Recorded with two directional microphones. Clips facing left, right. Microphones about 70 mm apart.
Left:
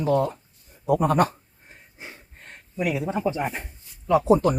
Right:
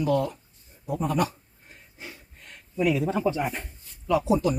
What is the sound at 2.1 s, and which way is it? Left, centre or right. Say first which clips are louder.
Snort: left 2 dB; left.